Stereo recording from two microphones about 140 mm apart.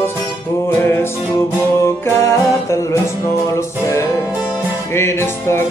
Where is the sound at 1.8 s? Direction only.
20° left (ahead or behind).